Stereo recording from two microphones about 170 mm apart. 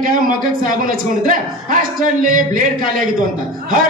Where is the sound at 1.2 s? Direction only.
50° right (ahead or behind).